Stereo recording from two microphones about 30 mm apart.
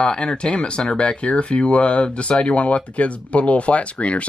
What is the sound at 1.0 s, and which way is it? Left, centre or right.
Speech, left.